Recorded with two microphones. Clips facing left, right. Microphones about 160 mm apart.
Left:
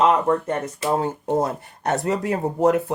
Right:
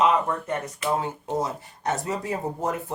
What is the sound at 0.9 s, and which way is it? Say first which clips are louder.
Speech: left 6 dB; 45° left (ahead or behind).